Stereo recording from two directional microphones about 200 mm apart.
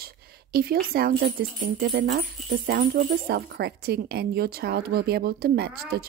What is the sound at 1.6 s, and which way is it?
A woman's voice, 60° right (ahead or behind).